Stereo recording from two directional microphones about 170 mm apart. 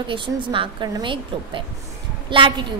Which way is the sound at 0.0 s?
30° right (ahead or behind).